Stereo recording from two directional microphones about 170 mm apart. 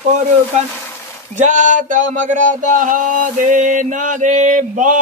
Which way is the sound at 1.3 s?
45° right (ahead or behind).